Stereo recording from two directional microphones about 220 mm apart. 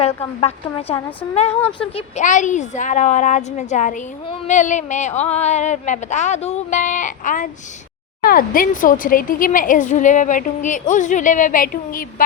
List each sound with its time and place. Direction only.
0.3 s a woman's voice: 25° left (ahead or behind)